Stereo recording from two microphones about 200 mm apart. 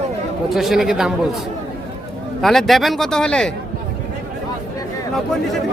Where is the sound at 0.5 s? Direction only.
Centre (ahead or behind).